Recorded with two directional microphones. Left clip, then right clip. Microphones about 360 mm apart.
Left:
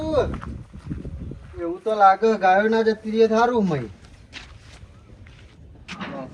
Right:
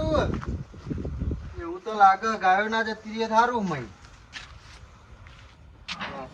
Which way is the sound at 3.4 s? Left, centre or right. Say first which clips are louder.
Left 5 dB; centre.